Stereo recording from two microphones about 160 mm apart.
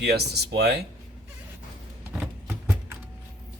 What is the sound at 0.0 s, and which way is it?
Speech, 90° right.